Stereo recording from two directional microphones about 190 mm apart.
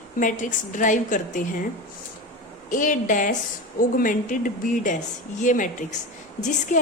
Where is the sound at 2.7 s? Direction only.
45° left (ahead or behind).